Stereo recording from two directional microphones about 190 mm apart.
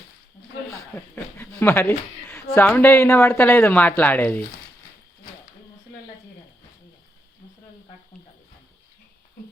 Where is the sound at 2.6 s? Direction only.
10° left (ahead or behind).